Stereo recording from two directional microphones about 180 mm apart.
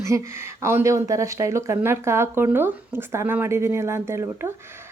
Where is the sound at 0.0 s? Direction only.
15° right (ahead or behind).